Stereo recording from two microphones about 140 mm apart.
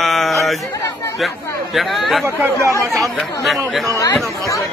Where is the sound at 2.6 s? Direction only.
20° right (ahead or behind).